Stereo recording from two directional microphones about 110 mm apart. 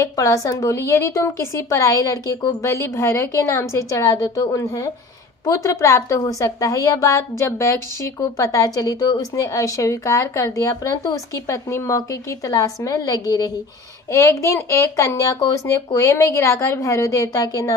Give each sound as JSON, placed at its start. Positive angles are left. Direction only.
{"t": 0.0, "sound": "a woman's voice", "side_deg": 30}